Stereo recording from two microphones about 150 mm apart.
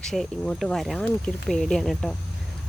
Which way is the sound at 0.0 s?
5° left (ahead or behind).